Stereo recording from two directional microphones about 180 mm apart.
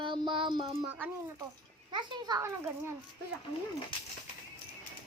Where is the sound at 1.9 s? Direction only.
25° right (ahead or behind).